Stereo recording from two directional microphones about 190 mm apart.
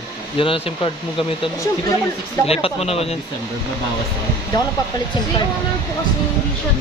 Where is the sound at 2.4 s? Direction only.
30° left (ahead or behind).